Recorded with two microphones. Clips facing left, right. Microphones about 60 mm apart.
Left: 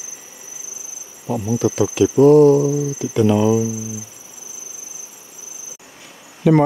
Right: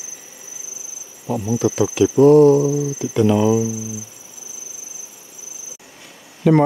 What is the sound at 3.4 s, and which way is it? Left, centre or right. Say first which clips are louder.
Cricket: even; right.